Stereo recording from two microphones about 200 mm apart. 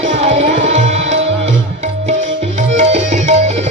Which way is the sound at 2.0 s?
35° right (ahead or behind).